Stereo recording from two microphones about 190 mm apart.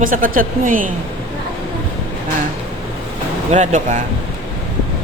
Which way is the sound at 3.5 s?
40° right (ahead or behind).